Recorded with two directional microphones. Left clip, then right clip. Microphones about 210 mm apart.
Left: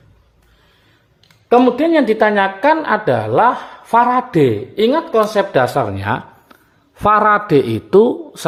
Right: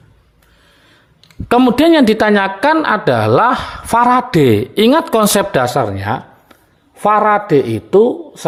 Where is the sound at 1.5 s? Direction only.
45° right (ahead or behind).